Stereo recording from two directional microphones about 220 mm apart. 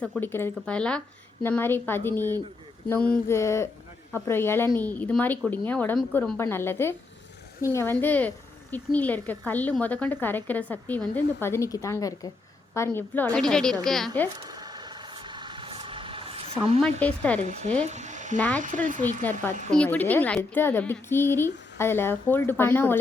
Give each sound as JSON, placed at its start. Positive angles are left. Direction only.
{"t": 0.0, "sound": "speech", "side_deg": 5}
{"t": 14.3, "sound": "a sound", "side_deg": -20}
{"t": 16.8, "sound": "speech", "side_deg": 5}
{"t": 17.4, "sound": "speech", "side_deg": -30}
{"t": 17.8, "sound": "frying", "side_deg": -30}
{"t": 18.3, "sound": "speech", "side_deg": 5}
{"t": 18.6, "sound": "speech", "side_deg": -35}
{"t": 19.2, "sound": "speech", "side_deg": 10}